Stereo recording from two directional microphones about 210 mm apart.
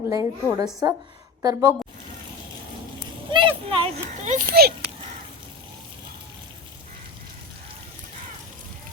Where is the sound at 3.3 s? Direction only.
25° right (ahead or behind).